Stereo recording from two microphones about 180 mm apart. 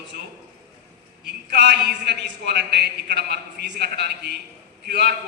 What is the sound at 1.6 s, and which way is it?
A man's voice, 70° right (ahead or behind).